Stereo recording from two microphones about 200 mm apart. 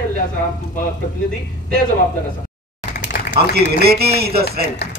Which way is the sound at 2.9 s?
40° left (ahead or behind).